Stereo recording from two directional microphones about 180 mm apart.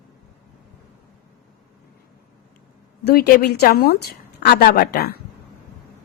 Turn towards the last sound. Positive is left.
turn(degrees=55)  # may be behind; listen again after turning